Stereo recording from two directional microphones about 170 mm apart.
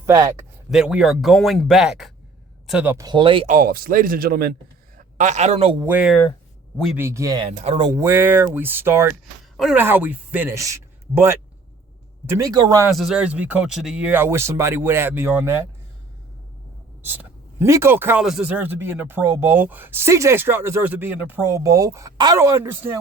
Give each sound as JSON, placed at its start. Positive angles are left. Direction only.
{"t": 0.0, "sound": "speech", "side_deg": -20}
{"t": 0.7, "sound": "a man's voice", "side_deg": -5}
{"t": 3.1, "sound": "speech", "side_deg": -30}
{"t": 3.4, "sound": "speech", "side_deg": -50}
{"t": 5.1, "sound": "a man's voice", "side_deg": -45}
{"t": 5.8, "sound": "a man's voice", "side_deg": -10}
{"t": 7.4, "sound": "a man's voice", "side_deg": -35}
{"t": 7.8, "sound": "a man's voice", "side_deg": -20}
{"t": 12.9, "sound": "a man's voice", "side_deg": 0}
{"t": 17.1, "sound": "a man's voice", "side_deg": -15}